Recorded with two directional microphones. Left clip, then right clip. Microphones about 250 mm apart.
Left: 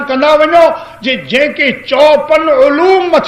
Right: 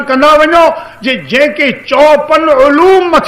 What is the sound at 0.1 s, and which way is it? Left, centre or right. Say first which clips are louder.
A man's voice: right 2 dB; right.